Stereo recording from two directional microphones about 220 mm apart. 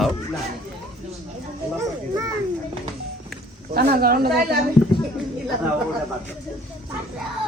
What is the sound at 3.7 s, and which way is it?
Speech, 45° right (ahead or behind).